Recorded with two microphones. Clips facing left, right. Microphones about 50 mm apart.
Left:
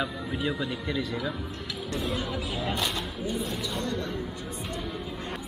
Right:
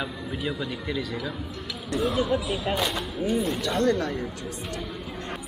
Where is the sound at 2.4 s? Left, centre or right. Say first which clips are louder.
Right 3 dB; right.